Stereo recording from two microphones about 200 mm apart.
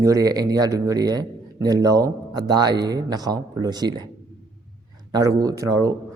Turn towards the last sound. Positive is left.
turn(degrees=-20)  # may be behind; listen again after turning